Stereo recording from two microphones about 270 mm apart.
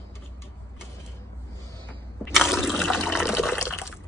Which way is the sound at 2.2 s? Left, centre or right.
Centre.